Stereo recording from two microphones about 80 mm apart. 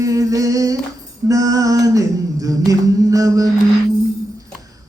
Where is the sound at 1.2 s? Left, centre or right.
Right.